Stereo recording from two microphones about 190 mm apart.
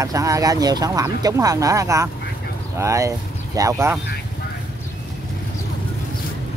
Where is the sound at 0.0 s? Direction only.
15° right (ahead or behind).